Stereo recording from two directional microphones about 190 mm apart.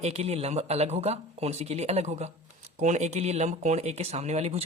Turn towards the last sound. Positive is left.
turn(degrees=-35)  # may be behind; listen again after turning